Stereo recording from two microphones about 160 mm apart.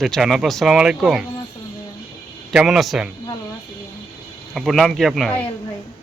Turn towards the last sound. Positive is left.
turn(degrees=0)  # may be behind; listen again after turning